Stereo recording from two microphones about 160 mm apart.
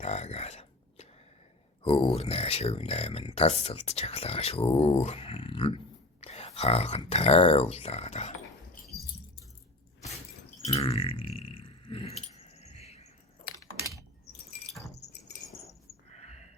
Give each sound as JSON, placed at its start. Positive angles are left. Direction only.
{"t": 0.0, "sound": "a sound", "side_deg": 45}
{"t": 1.8, "sound": "speech", "side_deg": 35}
{"t": 10.8, "sound": "keys jangling", "side_deg": 35}